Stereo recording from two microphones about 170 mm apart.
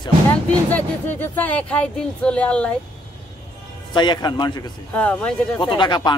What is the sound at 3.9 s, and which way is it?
Speech, 25° left (ahead or behind).